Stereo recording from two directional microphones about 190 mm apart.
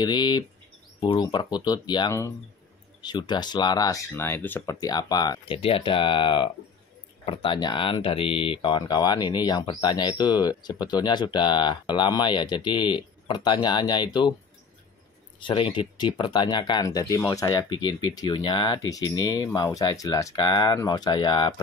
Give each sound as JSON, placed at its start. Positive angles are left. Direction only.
{"t": 0.0, "sound": "speech", "side_deg": 20}
{"t": 15.4, "sound": "speech", "side_deg": 30}